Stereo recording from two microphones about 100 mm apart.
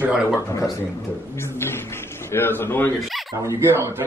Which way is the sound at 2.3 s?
20° left (ahead or behind).